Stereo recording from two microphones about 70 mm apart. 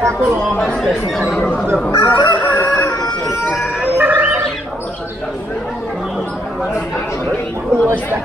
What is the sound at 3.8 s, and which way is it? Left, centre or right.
Music, right.